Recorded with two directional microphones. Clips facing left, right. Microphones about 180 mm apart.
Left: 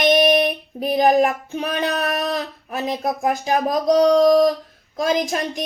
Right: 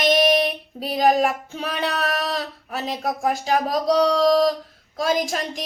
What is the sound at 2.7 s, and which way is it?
Speech, 15° left (ahead or behind).